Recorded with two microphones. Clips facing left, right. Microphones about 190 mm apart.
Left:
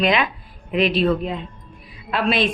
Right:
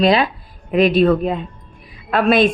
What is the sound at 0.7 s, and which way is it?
A woman's voice, 45° right (ahead or behind).